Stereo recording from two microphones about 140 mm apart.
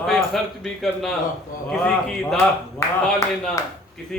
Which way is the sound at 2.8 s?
20° left (ahead or behind).